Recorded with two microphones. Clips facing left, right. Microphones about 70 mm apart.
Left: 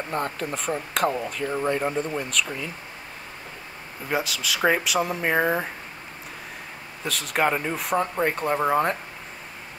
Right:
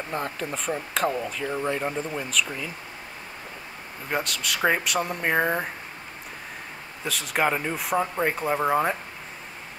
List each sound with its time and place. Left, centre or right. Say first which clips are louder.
0.1 s speech: left 2 dB; centre
4.1 s speech: left 2 dB; centre
7.1 s speech: left 1 dB; centre